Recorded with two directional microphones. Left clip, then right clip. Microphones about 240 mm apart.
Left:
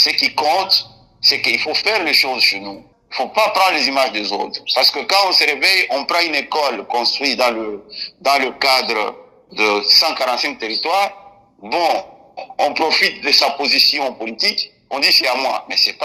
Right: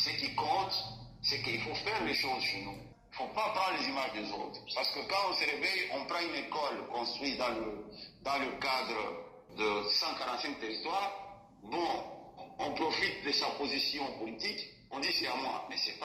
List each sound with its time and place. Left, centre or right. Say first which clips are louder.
0.0 s a man's voice: left 19 dB; left